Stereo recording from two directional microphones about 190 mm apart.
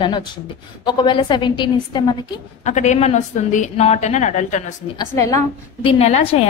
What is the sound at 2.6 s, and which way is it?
A woman's voice, 40° left (ahead or behind).